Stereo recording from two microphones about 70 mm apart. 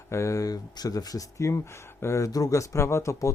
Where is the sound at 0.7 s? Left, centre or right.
Left.